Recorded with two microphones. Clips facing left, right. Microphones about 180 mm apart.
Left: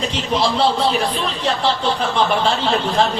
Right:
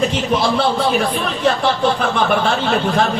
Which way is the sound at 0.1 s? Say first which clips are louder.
Right 2 dB; 55° right (ahead or behind).